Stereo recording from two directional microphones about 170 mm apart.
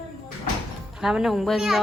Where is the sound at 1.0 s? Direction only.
Centre (ahead or behind).